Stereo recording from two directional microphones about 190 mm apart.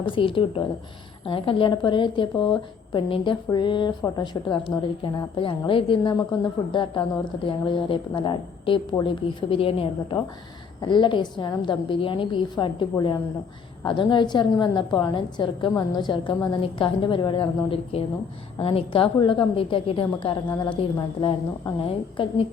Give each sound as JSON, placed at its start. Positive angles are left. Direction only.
{"t": 0.0, "sound": "a woman's voice", "side_deg": 25}